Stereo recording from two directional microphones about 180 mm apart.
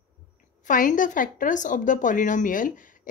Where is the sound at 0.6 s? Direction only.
45° left (ahead or behind).